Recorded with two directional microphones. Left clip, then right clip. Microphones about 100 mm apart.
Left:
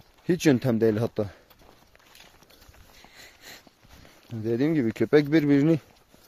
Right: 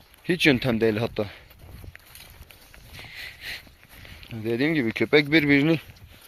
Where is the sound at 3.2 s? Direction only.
65° left (ahead or behind).